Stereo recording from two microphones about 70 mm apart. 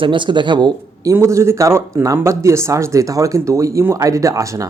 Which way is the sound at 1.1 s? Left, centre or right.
Right.